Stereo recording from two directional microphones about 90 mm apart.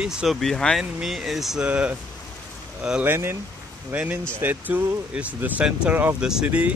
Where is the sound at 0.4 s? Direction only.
5° left (ahead or behind); by 2.0 s 10° right (ahead or behind).